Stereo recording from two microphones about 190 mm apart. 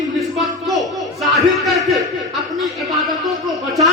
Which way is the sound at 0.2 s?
Centre (ahead or behind).